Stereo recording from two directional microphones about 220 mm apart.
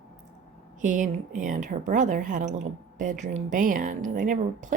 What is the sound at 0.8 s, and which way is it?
A woman's voice, 35° right (ahead or behind).